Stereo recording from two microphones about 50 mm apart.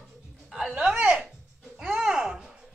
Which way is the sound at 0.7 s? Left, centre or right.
Centre.